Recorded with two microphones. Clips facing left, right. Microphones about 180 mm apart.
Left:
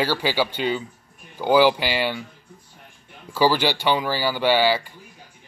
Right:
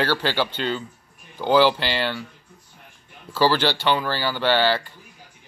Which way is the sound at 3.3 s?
10° left (ahead or behind).